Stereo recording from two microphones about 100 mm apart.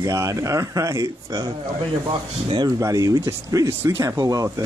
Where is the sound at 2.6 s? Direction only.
35° right (ahead or behind).